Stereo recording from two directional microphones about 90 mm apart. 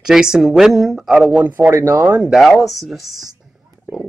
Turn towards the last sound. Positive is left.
turn(degrees=0)  # may be behind; listen again after turning